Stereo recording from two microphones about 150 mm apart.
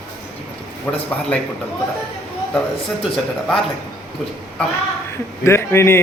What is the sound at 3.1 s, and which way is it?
Speech, centre (ahead or behind).